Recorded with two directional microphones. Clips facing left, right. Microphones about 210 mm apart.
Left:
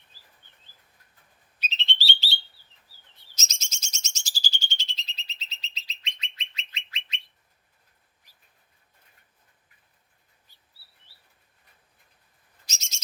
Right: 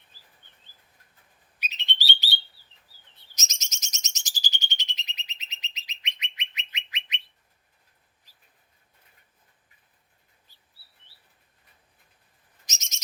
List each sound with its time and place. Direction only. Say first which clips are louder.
1.5 s bird: left 2 dB; 15° right (ahead or behind)
3.3 s bird: left 1 dB; 15° right (ahead or behind)
12.6 s bird: even; 20° right (ahead or behind)